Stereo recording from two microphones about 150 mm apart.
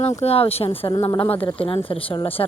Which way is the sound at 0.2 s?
40° left (ahead or behind).